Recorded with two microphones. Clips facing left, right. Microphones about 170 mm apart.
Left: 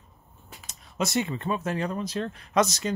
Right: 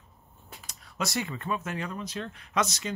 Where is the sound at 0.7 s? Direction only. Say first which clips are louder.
Left 4 dB; 20° left (ahead or behind).